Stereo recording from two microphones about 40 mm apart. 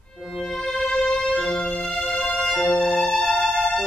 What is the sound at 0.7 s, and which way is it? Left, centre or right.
Music, left.